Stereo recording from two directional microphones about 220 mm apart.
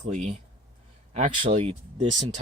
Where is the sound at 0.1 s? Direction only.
35° right (ahead or behind).